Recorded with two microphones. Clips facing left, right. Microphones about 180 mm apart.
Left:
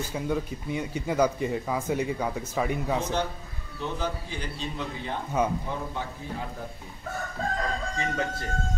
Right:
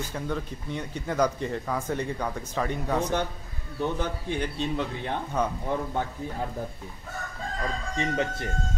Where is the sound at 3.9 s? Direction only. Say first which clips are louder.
Right 3 dB; 60° right (ahead or behind).